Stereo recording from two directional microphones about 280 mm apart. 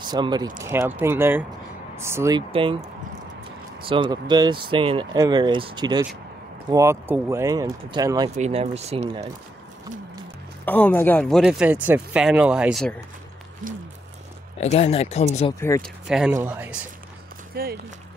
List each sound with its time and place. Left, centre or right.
0.0 s speech: centre
10.6 s speech: centre
14.6 s speech: left
16.1 s speech: centre
17.6 s speech: right